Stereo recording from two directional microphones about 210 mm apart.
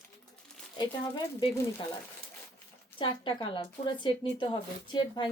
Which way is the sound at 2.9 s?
25° left (ahead or behind).